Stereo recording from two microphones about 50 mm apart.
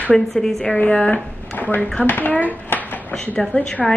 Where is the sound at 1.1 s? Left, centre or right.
Left.